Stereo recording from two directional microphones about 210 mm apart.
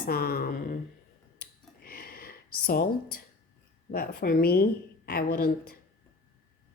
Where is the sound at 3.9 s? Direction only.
45° left (ahead or behind).